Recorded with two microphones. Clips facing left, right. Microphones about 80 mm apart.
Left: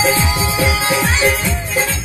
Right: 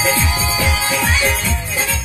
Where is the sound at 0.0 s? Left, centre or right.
Centre.